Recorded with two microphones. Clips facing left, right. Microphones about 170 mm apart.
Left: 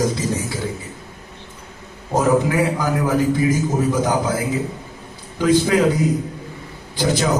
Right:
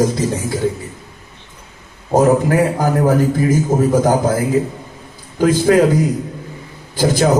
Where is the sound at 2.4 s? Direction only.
45° right (ahead or behind).